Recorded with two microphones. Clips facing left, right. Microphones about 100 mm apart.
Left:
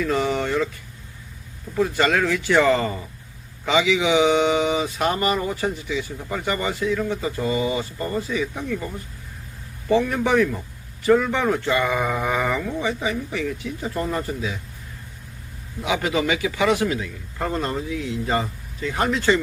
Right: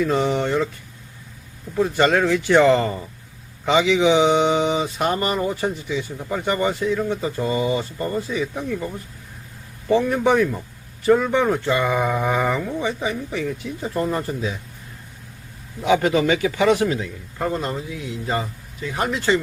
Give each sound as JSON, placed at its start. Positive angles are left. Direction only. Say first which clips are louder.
{"t": 0.0, "sound": "speech", "louder": "right 2 dB", "side_deg": -25}
{"t": 1.7, "sound": "speech", "louder": "right 2 dB", "side_deg": -25}
{"t": 9.9, "sound": "speech", "louder": "right 2 dB", "side_deg": -20}
{"t": 15.9, "sound": "speech", "louder": "right 5 dB", "side_deg": -35}
{"t": 17.5, "sound": "speech", "louder": "left 1 dB", "side_deg": -15}